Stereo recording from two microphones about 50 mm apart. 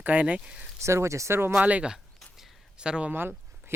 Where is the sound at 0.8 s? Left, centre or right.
Right.